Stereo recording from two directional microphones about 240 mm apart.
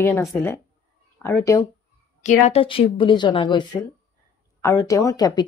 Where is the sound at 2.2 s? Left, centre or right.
Left.